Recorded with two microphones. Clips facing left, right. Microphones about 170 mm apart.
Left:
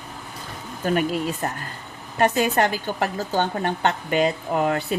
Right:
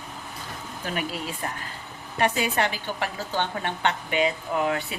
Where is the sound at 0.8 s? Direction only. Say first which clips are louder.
Left 9 dB; 45° left (ahead or behind).